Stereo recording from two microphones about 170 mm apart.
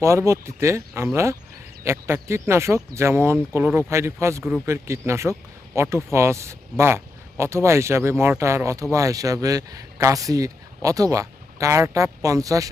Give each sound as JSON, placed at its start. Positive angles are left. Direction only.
{"t": 0.0, "sound": "speech", "side_deg": -15}